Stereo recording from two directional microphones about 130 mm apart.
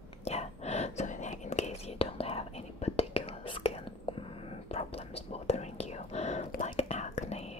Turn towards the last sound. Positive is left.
turn(degrees=55)  # may be behind; listen again after turning